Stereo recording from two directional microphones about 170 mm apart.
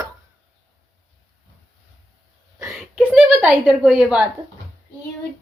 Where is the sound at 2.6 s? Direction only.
Centre (ahead or behind).